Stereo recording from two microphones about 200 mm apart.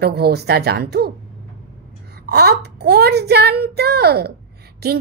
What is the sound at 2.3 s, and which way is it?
A woman's voice, 55° right (ahead or behind).